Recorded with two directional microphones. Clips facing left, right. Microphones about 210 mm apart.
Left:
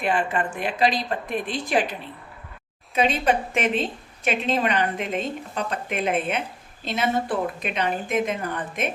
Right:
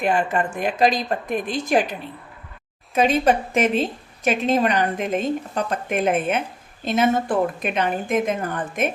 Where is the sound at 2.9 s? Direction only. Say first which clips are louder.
Right 4 dB; 45° right (ahead or behind).